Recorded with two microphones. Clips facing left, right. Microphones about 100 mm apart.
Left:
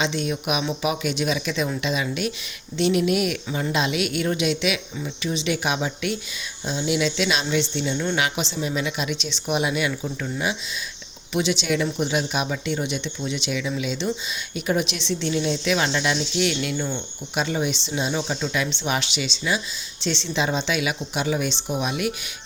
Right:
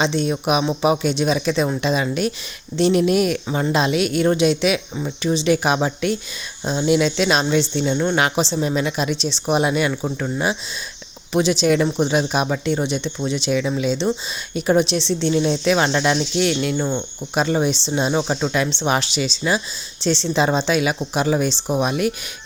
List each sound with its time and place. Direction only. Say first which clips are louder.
0.0 s speech: right 5 dB; 35° right (ahead or behind)
18.7 s speech: right 5 dB; 35° right (ahead or behind)